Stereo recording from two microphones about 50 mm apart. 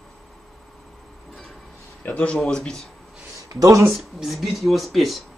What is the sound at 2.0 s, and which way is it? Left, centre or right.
Speech, left.